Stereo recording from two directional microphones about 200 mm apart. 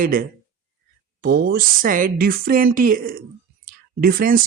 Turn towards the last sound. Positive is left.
turn(degrees=-45)  # may be behind; listen again after turning